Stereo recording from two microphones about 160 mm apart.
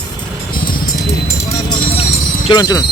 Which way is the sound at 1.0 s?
20° left (ahead or behind).